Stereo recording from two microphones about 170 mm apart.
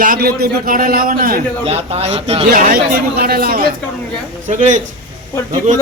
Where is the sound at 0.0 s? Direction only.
60° right (ahead or behind).